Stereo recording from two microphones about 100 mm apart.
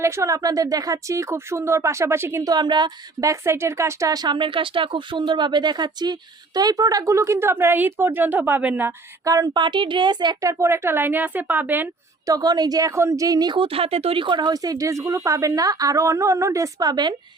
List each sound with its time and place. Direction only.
0.0 s speech: 30° right (ahead or behind)
2.4 s a woman's voice: 45° right (ahead or behind)
3.2 s speech: 30° right (ahead or behind)
4.1 s speech: 45° right (ahead or behind); by 8.9 s 20° right (ahead or behind)
9.2 s speech: 35° right (ahead or behind)
9.5 s a woman's voice: 50° right (ahead or behind)
10.4 s speech: 30° right (ahead or behind)
12.2 s speech: 40° right (ahead or behind)
13.6 s speech: 70° right (ahead or behind); by 17.2 s 45° right (ahead or behind)